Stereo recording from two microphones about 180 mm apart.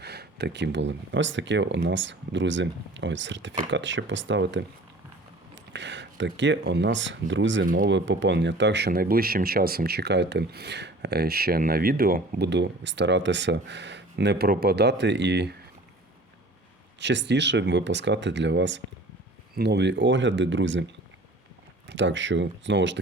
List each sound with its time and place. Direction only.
0.0 s speech: 65° right (ahead or behind); by 4.6 s 90° right
5.7 s speech: 75° right (ahead or behind)
7.6 s speech: 50° right (ahead or behind)
7.9 s speech: 85° right; by 15.5 s 70° right (ahead or behind)
17.0 s speech: 80° right
21.8 s speech: 90° right